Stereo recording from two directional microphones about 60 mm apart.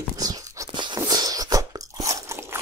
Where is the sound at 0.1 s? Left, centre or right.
Right.